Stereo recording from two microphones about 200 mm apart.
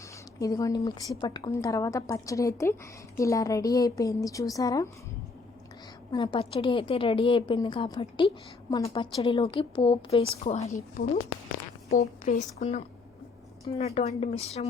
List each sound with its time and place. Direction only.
0.3 s a woman's voice: 15° left (ahead or behind)
6.1 s a woman's voice: 20° left (ahead or behind)